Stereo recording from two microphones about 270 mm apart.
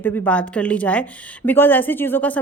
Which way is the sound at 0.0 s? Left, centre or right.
Centre.